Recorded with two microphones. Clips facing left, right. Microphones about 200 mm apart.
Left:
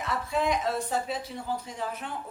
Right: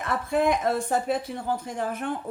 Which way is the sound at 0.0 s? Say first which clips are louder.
Right 5 dB; 55° right (ahead or behind).